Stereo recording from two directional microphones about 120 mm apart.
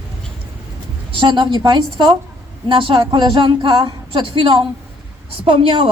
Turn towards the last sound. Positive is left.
turn(degrees=-50)  # may be behind; listen again after turning